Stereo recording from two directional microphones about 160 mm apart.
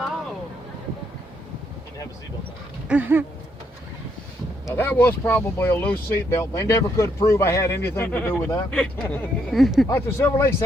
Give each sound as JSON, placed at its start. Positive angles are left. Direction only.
{"t": 2.8, "sound": "a sound", "side_deg": -10}
{"t": 4.7, "sound": "speech", "side_deg": 15}
{"t": 9.9, "sound": "speech", "side_deg": 15}